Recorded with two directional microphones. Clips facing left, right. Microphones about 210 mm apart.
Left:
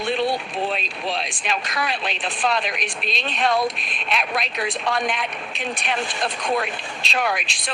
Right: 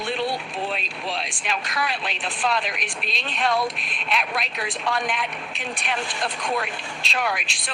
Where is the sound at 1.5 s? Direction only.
20° left (ahead or behind).